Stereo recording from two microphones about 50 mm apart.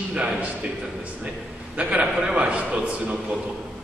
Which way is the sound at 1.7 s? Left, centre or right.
Right.